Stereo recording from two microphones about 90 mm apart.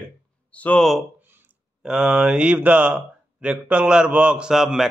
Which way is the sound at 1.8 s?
10° right (ahead or behind).